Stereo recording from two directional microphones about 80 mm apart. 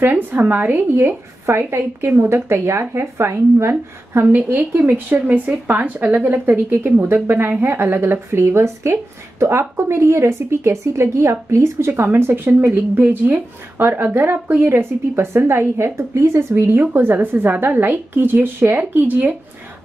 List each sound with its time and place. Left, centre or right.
0.0 s speech: right